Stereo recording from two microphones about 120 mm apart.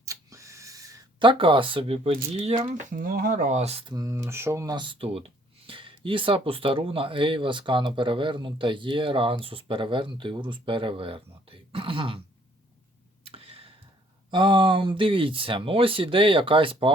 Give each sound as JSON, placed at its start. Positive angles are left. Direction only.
{"t": 0.0, "sound": "a sound", "side_deg": -25}
{"t": 1.2, "sound": "speech", "side_deg": -45}
{"t": 2.9, "sound": "speech", "side_deg": -90}
{"t": 3.8, "sound": "speech", "side_deg": -30}
{"t": 13.2, "sound": "tick-tock", "side_deg": -55}
{"t": 14.3, "sound": "speech", "side_deg": -40}